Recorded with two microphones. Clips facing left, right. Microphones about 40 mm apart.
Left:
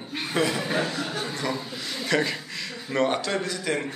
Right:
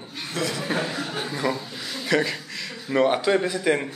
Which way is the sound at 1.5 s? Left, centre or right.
Centre.